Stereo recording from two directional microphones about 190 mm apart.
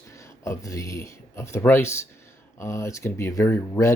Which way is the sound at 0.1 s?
15° left (ahead or behind).